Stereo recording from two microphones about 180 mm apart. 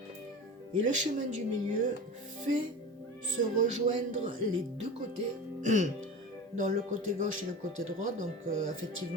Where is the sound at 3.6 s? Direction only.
45° right (ahead or behind).